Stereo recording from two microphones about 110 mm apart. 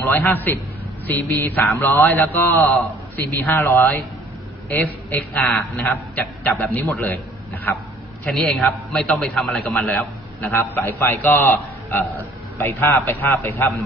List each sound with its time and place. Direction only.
0.0 s a man's voice: 20° left (ahead or behind)
8.3 s a man's voice: centre (ahead or behind); by 13.7 s 20° left (ahead or behind)